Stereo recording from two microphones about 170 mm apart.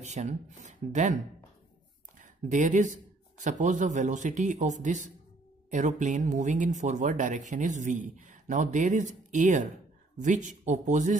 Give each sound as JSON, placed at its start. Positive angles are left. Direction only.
{"t": 0.0, "sound": "speech", "side_deg": -40}
{"t": 2.1, "sound": "a sound", "side_deg": -50}
{"t": 3.4, "sound": "speech", "side_deg": -45}